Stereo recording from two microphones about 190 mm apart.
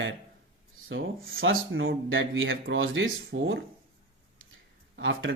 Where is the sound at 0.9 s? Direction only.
85° right.